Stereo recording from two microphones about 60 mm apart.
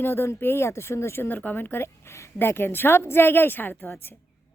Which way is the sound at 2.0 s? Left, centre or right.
Left.